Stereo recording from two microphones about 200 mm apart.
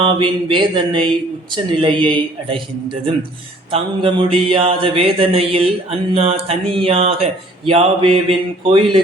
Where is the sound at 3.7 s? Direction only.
25° right (ahead or behind).